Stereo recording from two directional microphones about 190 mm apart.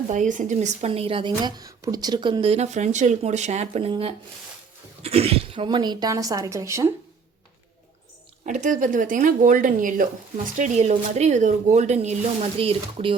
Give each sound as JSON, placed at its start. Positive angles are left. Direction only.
{"t": 0.1, "sound": "speech", "side_deg": -40}
{"t": 8.4, "sound": "speech", "side_deg": -40}